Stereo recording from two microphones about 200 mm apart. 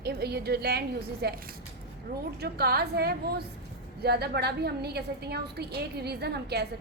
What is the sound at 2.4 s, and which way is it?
A woman's voice, 50° right (ahead or behind).